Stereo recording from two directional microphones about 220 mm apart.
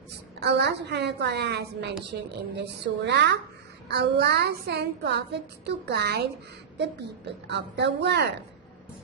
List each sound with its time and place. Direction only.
0.3 s a woman's voice: 50° right (ahead or behind)
7.4 s a woman's voice: 50° right (ahead or behind)